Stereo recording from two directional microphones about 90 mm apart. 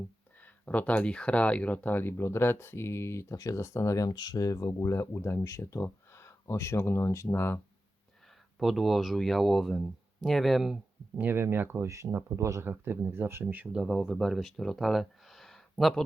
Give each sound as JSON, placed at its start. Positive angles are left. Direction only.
{"t": 0.4, "sound": "speech", "side_deg": 15}
{"t": 8.5, "sound": "speech", "side_deg": 0}
{"t": 11.2, "sound": "speech", "side_deg": -25}
{"t": 13.7, "sound": "speech", "side_deg": 0}